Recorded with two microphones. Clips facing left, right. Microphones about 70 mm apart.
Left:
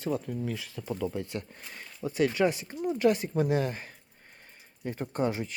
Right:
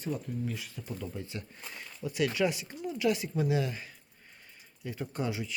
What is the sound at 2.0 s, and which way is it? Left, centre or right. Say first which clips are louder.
Speech: left 3 dB; left.